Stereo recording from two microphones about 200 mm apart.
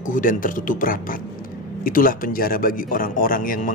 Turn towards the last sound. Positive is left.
turn(degrees=45)  # may be behind; listen again after turning